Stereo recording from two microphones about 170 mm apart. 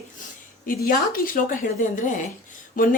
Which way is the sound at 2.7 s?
55° left (ahead or behind).